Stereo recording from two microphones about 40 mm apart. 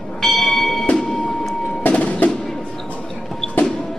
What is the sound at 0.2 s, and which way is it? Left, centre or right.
Bell, centre.